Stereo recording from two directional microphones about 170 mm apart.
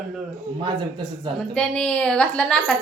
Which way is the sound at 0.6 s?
30° right (ahead or behind).